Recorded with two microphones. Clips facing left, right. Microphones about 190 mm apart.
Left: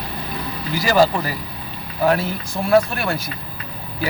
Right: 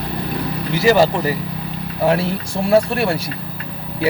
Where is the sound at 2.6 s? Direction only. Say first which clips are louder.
Right 2 dB; 30° right (ahead or behind).